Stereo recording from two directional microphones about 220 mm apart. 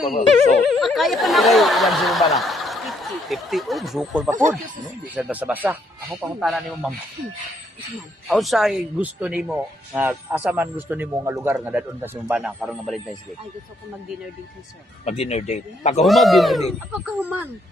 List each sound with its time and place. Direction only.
0.7 s speech: centre (ahead or behind)
8.3 s speech: centre (ahead or behind)
15.0 s speech: 30° left (ahead or behind)
16.0 s speech: centre (ahead or behind)